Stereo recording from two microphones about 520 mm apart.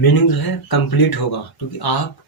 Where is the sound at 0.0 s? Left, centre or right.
Left.